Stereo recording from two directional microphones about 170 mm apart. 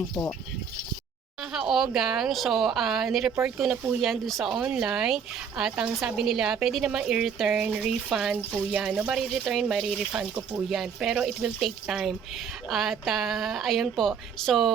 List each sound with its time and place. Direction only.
1.4 s speech: 5° right (ahead or behind)